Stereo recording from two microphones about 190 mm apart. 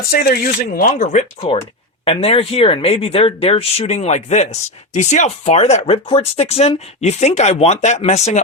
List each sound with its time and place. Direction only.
0.1 s speech: 50° left (ahead or behind); by 8.4 s 35° left (ahead or behind)